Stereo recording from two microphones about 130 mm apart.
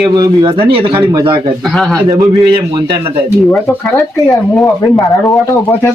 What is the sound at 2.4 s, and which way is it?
Speech, 35° right (ahead or behind).